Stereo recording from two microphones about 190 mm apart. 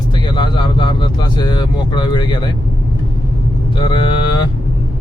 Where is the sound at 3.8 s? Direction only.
25° left (ahead or behind).